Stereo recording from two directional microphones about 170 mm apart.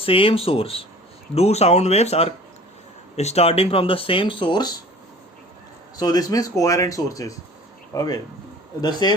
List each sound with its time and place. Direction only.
0.0 s speech: 30° left (ahead or behind)
6.0 s speech: 20° left (ahead or behind)